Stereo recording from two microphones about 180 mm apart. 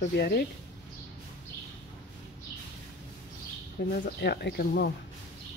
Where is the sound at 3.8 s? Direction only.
60° left (ahead or behind).